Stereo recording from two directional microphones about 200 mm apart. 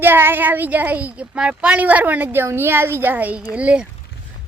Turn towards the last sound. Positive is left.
turn(degrees=-5)  # may be behind; listen again after turning